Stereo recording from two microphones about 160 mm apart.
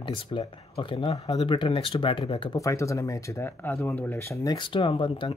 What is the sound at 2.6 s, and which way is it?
Speech, 20° left (ahead or behind).